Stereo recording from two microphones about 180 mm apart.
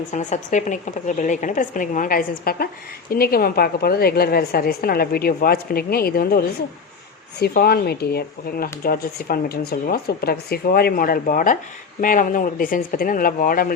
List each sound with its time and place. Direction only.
0.1 s a woman's voice: 40° left (ahead or behind)